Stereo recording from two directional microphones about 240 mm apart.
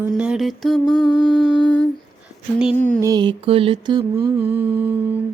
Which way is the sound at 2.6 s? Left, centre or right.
Centre.